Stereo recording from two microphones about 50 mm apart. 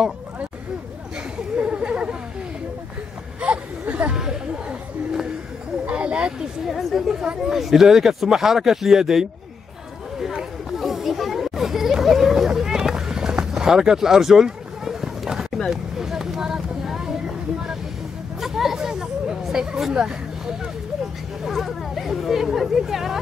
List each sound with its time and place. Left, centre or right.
1.6 s a sound: right
3.3 s a sound: right
4.1 s a sound: centre
5.9 s wild animals: right
6.7 s a woman's voice: centre
10.7 s children playing: centre
15.7 s vehicle: centre
18.4 s hubbub: centre
21.5 s speech: centre